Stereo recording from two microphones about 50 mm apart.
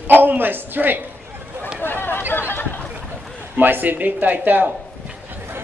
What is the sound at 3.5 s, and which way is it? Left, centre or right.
A man's voice, right.